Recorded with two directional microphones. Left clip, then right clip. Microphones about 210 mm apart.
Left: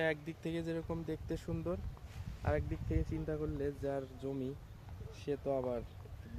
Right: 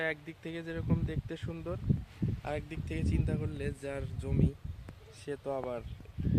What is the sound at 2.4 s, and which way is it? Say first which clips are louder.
Speech: left 2 dB; 25° right (ahead or behind).